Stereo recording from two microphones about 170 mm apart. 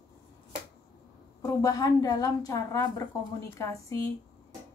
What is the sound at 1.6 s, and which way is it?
A woman's voice, 20° left (ahead or behind).